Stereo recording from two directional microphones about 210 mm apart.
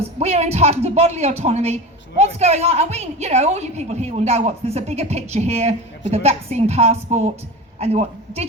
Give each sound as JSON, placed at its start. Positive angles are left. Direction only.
{"t": 0.2, "sound": "a woman's voice", "side_deg": -30}